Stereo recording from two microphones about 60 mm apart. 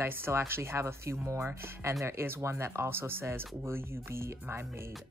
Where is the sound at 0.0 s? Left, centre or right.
Right.